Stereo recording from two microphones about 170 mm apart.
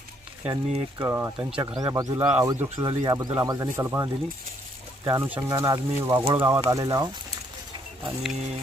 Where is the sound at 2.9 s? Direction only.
35° right (ahead or behind).